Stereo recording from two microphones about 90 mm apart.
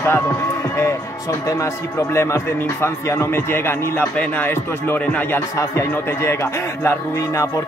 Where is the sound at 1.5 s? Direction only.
30° left (ahead or behind).